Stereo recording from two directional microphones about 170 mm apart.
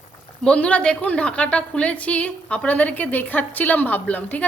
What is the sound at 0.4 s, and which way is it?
A woman's voice, 5° left (ahead or behind).